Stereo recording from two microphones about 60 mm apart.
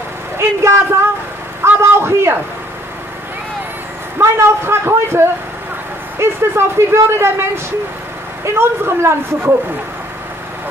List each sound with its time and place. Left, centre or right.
0.4 s speech: right
1.6 s a sound: right
4.2 s speech: right